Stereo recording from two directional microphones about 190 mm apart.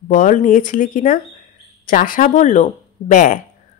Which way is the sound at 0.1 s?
45° left (ahead or behind).